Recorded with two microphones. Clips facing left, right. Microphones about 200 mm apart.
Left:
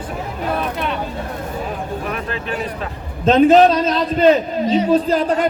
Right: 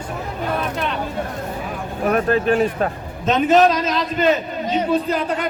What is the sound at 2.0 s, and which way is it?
Speech, 45° right (ahead or behind).